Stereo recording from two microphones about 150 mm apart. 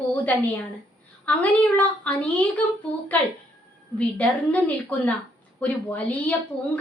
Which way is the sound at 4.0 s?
10° left (ahead or behind).